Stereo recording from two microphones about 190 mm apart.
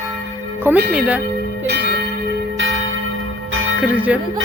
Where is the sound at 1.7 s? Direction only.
60° right (ahead or behind).